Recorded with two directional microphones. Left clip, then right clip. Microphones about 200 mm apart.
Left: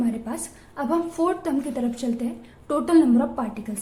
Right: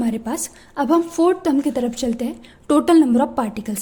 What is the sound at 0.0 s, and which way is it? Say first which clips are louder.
A woman's voice: right 4 dB; 45° right (ahead or behind).